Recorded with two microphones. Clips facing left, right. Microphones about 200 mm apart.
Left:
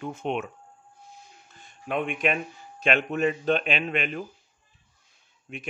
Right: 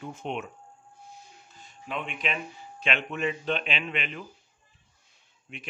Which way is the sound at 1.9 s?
50° left (ahead or behind).